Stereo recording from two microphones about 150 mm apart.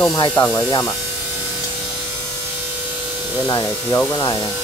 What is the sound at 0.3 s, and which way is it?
Speech, 15° left (ahead or behind).